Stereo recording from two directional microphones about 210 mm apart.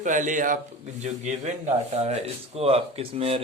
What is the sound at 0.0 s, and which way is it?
A man's voice, 35° right (ahead or behind).